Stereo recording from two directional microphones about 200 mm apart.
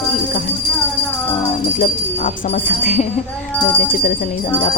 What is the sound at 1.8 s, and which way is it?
Speech, 35° left (ahead or behind).